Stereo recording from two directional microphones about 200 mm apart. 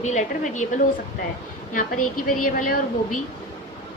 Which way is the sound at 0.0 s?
35° left (ahead or behind).